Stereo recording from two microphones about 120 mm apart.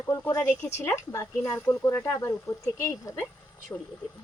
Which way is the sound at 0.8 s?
20° left (ahead or behind).